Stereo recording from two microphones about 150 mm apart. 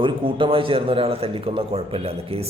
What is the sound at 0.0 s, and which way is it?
A man's voice, 35° right (ahead or behind).